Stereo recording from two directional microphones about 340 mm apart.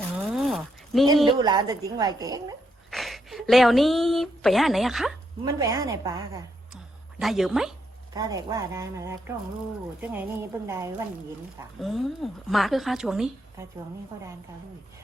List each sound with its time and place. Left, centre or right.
0.1 s a sound: centre
1.0 s a woman's voice: centre
2.9 s a woman's voice: centre